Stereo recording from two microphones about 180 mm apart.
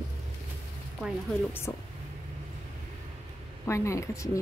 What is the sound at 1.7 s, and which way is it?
Speech, 15° left (ahead or behind).